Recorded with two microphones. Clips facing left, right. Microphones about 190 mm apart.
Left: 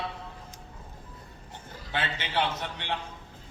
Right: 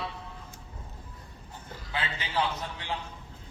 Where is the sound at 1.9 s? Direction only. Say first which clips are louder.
Left 1 dB; 75° left (ahead or behind).